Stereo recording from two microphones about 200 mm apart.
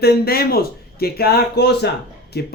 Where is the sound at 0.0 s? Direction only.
50° left (ahead or behind).